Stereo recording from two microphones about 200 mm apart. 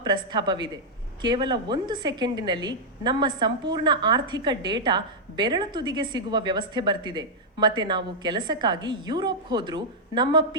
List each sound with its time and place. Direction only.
0.0 s a woman's voice: 20° right (ahead or behind)